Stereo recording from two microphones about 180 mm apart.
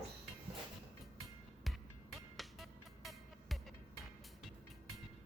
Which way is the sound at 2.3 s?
Centre (ahead or behind).